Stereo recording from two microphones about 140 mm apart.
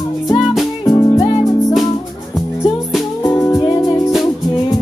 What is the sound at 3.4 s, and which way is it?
Music, 20° left (ahead or behind).